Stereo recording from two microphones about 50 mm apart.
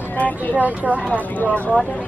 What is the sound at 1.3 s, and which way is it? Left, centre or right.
Speech, left.